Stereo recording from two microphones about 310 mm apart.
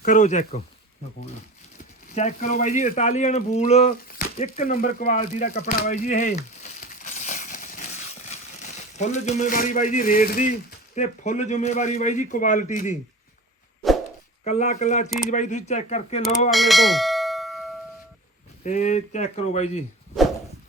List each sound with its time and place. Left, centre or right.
0.0 s speech: left
2.0 s speech: left
14.4 s speech: left
16.5 s bell: centre
18.6 s speech: left